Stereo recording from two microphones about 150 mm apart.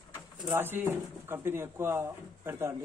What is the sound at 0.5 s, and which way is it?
Speech, 15° right (ahead or behind).